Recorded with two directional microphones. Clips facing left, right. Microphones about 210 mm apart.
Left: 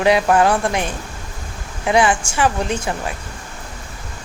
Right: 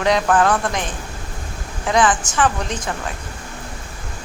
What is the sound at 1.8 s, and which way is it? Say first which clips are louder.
A woman's voice: left 1 dB; 10° left (ahead or behind).